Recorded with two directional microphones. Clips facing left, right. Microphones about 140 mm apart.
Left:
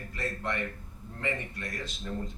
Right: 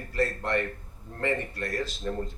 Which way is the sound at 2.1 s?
50° right (ahead or behind).